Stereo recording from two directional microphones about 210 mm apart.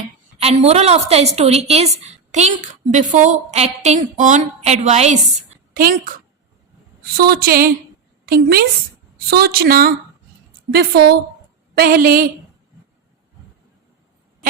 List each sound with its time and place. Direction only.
0.3 s a woman's voice: 30° right (ahead or behind)
7.2 s speech: 45° right (ahead or behind)